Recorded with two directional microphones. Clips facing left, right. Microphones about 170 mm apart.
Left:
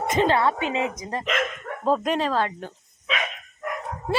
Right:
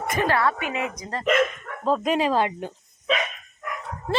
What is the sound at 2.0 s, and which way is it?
Speech, 10° right (ahead or behind).